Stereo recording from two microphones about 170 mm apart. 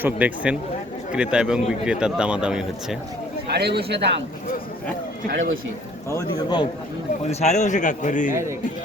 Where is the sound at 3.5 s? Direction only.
70° right (ahead or behind).